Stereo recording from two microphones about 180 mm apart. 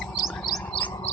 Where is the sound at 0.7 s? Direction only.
30° left (ahead or behind).